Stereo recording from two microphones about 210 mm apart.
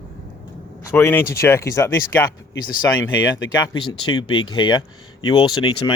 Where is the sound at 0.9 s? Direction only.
10° left (ahead or behind).